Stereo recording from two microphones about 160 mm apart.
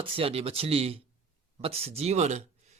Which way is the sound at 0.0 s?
35° right (ahead or behind).